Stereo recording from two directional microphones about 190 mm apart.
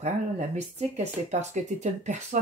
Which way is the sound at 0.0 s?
35° right (ahead or behind).